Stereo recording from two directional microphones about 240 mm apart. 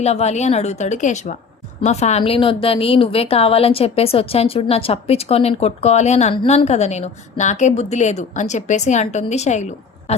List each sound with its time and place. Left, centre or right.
0.0 s a woman's voice: left